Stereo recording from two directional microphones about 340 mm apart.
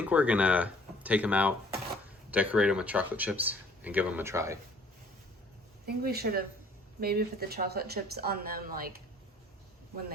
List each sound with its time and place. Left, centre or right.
0.0 s speech: centre
5.8 s a woman's voice: right